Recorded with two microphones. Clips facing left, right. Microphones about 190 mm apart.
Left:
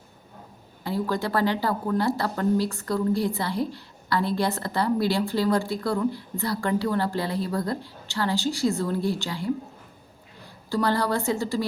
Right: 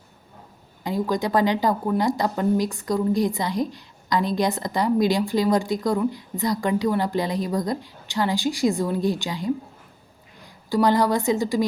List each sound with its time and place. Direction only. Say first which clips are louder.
0.9 s a woman's voice: right 3 dB; 15° right (ahead or behind)